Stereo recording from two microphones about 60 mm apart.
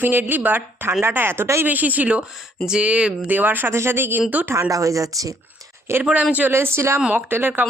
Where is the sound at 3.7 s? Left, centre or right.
Right.